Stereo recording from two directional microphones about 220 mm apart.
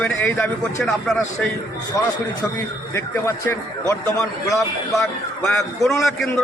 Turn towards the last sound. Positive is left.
turn(degrees=0)  # may be behind; listen again after turning